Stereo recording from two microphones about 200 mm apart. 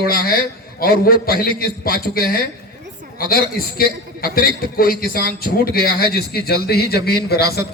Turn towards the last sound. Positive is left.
turn(degrees=55)  # may be behind; listen again after turning